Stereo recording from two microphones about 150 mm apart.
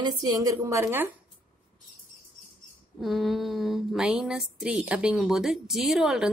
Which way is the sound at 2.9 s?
Centre (ahead or behind).